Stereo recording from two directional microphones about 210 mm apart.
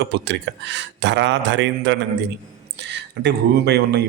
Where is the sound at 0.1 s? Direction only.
55° right (ahead or behind).